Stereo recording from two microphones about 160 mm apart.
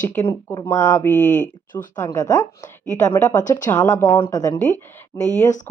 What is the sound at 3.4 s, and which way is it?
Speech, 50° left (ahead or behind).